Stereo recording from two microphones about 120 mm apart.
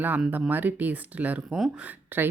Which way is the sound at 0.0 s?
15° right (ahead or behind).